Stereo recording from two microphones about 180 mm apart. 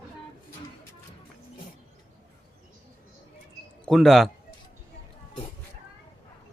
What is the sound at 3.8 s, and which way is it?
Speech, centre (ahead or behind).